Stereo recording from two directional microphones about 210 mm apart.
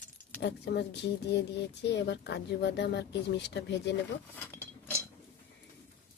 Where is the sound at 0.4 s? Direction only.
55° left (ahead or behind).